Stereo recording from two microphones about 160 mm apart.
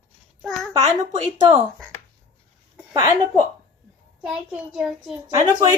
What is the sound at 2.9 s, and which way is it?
Speech, 25° right (ahead or behind).